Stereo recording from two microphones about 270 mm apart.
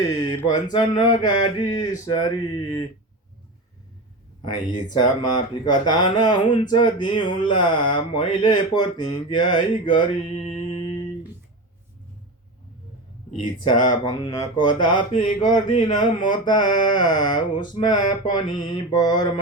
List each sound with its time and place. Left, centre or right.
0.0 s speech: centre
4.5 s speech: centre
13.7 s speech: centre
15.1 s a sound: left
15.4 s speech: centre
17.5 s a sound: centre
18.6 s speech: centre